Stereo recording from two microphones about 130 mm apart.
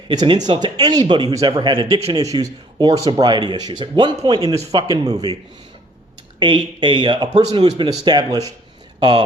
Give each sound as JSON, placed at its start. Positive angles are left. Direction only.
{"t": 0.1, "sound": "speech", "side_deg": -35}
{"t": 6.4, "sound": "speech", "side_deg": -40}